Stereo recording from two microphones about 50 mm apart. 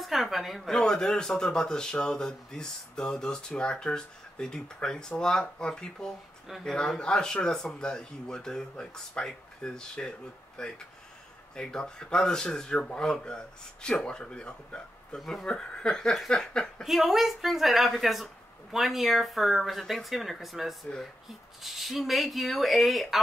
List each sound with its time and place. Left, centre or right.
0.0 s a woman's voice: centre
0.7 s speech: centre
15.1 s speech: centre
15.4 s speech: centre
16.8 s speech: centre